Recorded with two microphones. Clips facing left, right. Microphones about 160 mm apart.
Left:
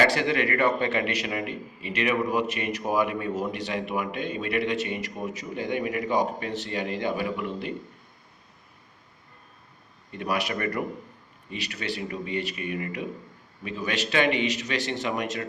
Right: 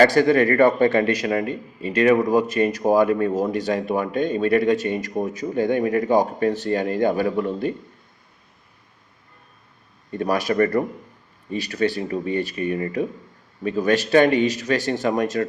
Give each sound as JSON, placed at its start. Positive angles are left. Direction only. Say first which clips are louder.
{"t": 0.0, "sound": "speech", "louder": "right 8 dB", "side_deg": -45}
{"t": 10.1, "sound": "speech", "louder": "right 7 dB", "side_deg": -40}